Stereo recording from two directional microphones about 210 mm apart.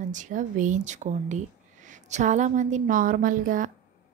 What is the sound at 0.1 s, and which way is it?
Speech, 35° right (ahead or behind).